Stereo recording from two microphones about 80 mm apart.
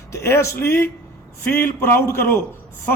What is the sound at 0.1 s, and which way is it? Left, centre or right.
A man's voice, left.